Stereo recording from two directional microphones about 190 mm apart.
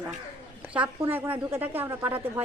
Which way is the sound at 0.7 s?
10° right (ahead or behind).